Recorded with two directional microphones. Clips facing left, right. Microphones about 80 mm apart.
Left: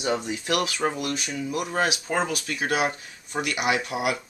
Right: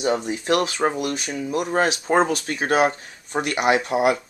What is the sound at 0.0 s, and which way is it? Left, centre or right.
Speech, right.